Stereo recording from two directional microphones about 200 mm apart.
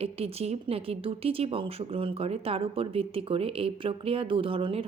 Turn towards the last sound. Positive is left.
turn(degrees=-25)  # may be behind; listen again after turning